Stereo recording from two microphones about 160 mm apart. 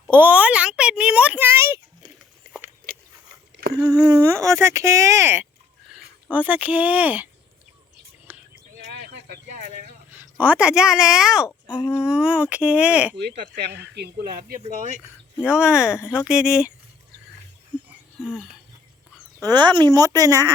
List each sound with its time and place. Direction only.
0.1 s a sound: 10° right (ahead or behind)
2.9 s a sound: 65° right (ahead or behind)
3.8 s speech: 5° right (ahead or behind)
4.0 s speech: 20° right (ahead or behind)
8.3 s a sound: 10° right (ahead or behind)
8.9 s a sound: 90° right; by 9.4 s 70° right (ahead or behind)
9.5 s vehicle: 55° right (ahead or behind)
10.1 s speech: 10° right (ahead or behind)
13.1 s speech: 90° right; by 14.6 s 75° right (ahead or behind)
15.5 s speech: 5° right (ahead or behind)
18.2 s speech: 5° right (ahead or behind)
19.5 s speech: 30° right (ahead or behind)